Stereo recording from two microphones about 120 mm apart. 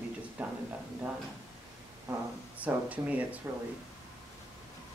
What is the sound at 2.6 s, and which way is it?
Speech, 10° right (ahead or behind).